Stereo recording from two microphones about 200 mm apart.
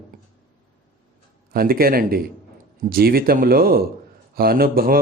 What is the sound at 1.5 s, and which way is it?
Speech, 45° right (ahead or behind).